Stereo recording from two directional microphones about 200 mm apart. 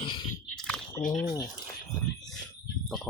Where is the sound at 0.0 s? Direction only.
25° left (ahead or behind).